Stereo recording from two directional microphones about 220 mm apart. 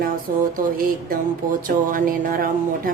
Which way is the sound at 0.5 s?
40° right (ahead or behind).